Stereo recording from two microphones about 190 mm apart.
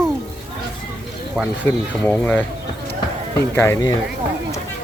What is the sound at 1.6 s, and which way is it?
Speech, 10° left (ahead or behind).